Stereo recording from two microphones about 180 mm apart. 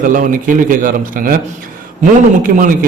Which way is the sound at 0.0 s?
45° right (ahead or behind).